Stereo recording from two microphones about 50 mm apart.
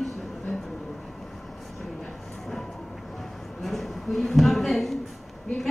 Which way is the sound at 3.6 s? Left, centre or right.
Centre.